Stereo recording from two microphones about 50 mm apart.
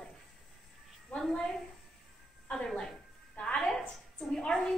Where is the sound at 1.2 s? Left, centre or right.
Centre.